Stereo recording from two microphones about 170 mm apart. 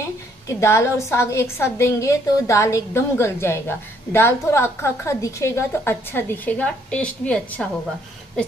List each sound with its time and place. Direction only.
0.5 s a woman's voice: 15° left (ahead or behind)